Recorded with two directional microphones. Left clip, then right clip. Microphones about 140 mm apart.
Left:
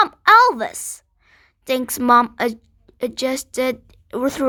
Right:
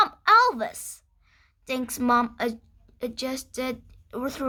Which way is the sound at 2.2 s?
45° left (ahead or behind).